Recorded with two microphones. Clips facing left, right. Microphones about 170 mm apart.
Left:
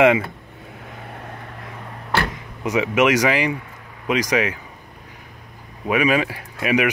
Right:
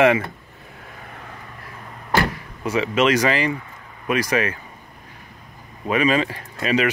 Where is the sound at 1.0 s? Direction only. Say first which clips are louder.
Left 4 dB; 65° left (ahead or behind).